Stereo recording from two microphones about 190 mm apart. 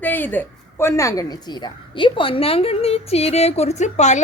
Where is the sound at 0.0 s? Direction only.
10° left (ahead or behind).